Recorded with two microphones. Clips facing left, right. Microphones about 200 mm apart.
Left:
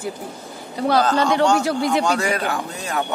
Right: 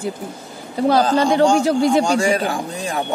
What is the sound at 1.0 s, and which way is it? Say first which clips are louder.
Speech: right 2 dB; 15° right (ahead or behind).